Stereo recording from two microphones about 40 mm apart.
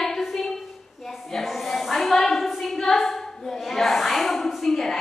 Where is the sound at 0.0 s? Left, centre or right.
Centre.